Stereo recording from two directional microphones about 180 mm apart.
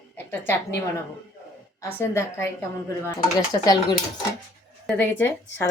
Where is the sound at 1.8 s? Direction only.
15° left (ahead or behind).